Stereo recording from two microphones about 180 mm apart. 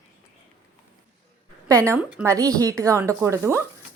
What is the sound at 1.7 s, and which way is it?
A woman's voice, 15° right (ahead or behind).